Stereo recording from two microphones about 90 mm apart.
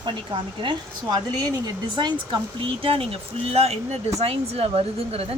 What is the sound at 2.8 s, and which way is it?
Speech, 90° right.